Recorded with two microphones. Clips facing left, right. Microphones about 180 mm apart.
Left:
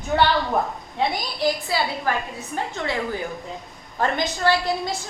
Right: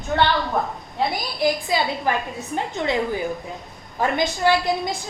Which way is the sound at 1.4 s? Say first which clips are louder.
Right 2 dB; 15° right (ahead or behind).